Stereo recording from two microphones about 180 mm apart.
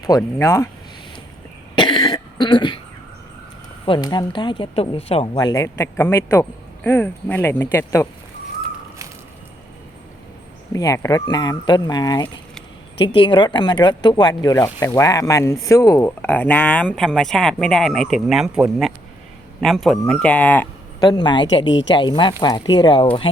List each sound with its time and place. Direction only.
0.2 s speech: 15° left (ahead or behind)
1.7 s cough: 25° left (ahead or behind)
3.8 s speech: 25° left (ahead or behind)
10.7 s speech: 20° left (ahead or behind)
21.0 s speech: 25° left (ahead or behind)
21.7 s speech: 90° left
21.9 s speech: 25° left (ahead or behind)